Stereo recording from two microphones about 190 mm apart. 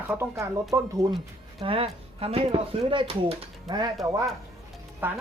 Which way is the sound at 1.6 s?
30° right (ahead or behind).